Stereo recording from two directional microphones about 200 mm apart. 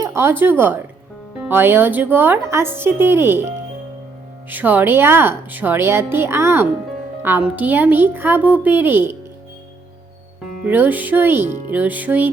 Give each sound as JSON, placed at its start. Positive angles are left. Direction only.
{"t": 0.0, "sound": "a woman's voice", "side_deg": -15}
{"t": 4.4, "sound": "a woman's voice", "side_deg": -10}
{"t": 10.7, "sound": "a woman's voice", "side_deg": -10}